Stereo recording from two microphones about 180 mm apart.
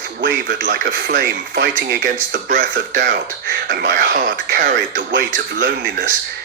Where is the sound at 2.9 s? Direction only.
60° right (ahead or behind).